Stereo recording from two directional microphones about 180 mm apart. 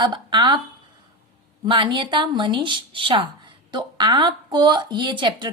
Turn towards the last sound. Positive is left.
turn(degrees=-25)  # may be behind; listen again after turning